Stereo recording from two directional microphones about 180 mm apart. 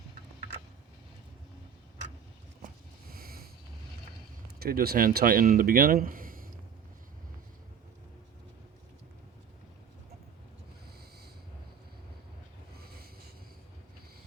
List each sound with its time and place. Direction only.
3.1 s a sound: 55° right (ahead or behind)
4.6 s speech: 60° right (ahead or behind)
12.7 s snort: 60° right (ahead or behind)